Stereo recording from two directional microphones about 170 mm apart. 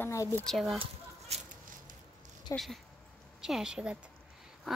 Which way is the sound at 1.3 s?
40° right (ahead or behind).